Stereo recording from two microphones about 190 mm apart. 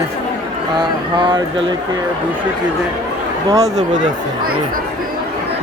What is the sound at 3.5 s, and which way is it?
Speech, 15° right (ahead or behind).